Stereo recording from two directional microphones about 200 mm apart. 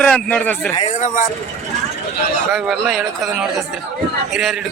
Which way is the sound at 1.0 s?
35° left (ahead or behind).